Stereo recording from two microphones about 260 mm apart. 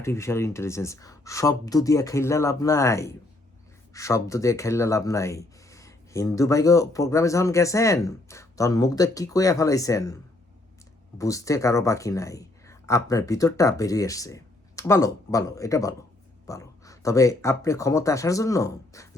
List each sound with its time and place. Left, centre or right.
0.0 s speech: centre
11.2 s speech: centre